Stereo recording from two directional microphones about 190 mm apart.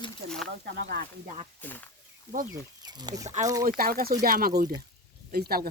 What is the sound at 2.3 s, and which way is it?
Speech, 45° right (ahead or behind).